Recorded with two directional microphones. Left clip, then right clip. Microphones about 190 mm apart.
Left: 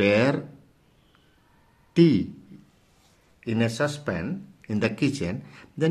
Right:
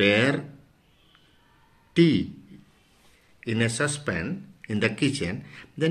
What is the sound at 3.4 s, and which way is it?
Speech, 40° left (ahead or behind).